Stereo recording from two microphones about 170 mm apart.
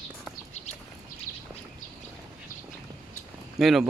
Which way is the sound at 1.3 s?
15° right (ahead or behind).